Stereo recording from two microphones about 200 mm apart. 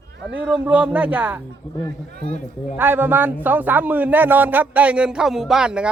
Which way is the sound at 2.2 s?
30° left (ahead or behind).